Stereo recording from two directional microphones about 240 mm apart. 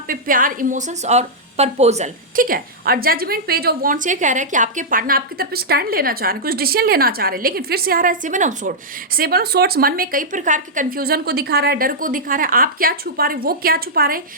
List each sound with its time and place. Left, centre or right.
0.1 s a woman's voice: right